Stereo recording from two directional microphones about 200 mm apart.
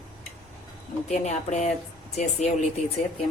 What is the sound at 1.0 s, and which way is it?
A woman's voice, 35° left (ahead or behind).